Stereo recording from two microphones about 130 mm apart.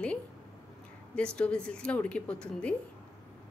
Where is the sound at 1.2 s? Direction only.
10° left (ahead or behind).